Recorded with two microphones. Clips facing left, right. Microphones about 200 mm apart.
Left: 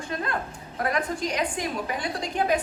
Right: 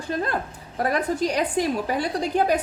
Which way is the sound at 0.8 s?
35° right (ahead or behind).